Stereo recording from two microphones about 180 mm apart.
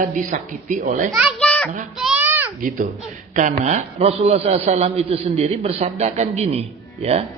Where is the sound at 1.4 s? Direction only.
10° left (ahead or behind).